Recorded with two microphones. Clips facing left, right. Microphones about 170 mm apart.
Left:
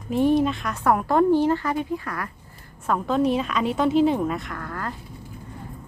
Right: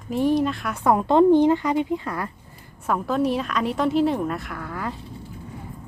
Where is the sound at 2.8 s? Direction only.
5° right (ahead or behind).